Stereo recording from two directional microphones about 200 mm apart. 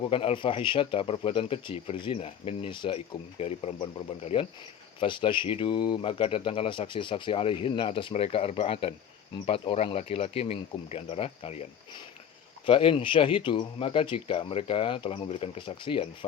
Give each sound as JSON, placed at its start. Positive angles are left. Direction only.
{"t": 0.0, "sound": "speech", "side_deg": 25}
{"t": 12.6, "sound": "speech", "side_deg": 25}